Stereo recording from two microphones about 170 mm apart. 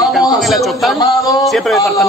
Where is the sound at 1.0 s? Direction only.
20° left (ahead or behind).